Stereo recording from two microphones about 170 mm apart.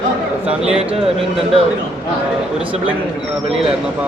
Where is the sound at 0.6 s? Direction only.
35° right (ahead or behind).